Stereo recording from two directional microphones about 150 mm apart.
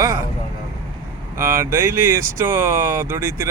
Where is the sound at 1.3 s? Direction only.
15° right (ahead or behind).